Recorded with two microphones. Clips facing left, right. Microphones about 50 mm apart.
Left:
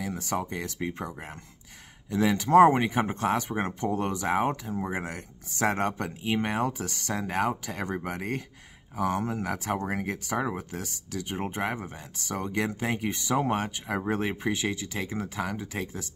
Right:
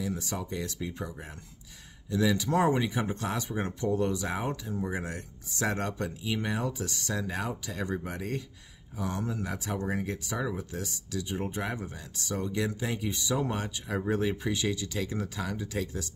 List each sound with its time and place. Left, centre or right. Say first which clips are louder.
0.0 s speech: left 3 dB; left